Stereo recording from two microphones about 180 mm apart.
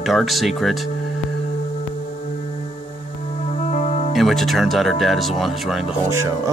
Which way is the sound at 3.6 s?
45° left (ahead or behind).